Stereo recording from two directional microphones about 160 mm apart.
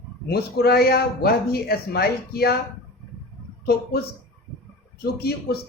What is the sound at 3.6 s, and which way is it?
Speech, 75° left (ahead or behind).